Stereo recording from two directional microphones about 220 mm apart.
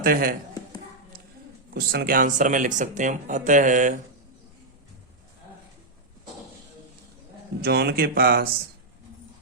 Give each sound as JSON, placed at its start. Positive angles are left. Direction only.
{"t": 0.0, "sound": "speech", "side_deg": -40}
{"t": 1.7, "sound": "speech", "side_deg": -45}
{"t": 7.6, "sound": "speech", "side_deg": -45}